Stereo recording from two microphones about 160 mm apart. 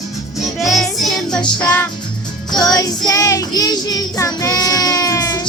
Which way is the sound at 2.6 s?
25° left (ahead or behind).